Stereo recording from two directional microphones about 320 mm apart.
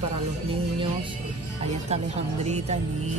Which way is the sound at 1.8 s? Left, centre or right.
Centre.